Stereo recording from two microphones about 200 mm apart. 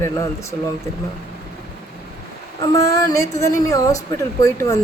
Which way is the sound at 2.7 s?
15° left (ahead or behind).